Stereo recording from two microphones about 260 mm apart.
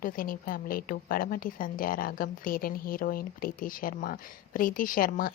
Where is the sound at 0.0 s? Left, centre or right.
Left.